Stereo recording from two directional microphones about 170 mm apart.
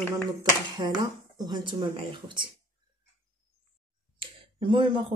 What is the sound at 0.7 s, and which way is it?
Speech, 25° right (ahead or behind).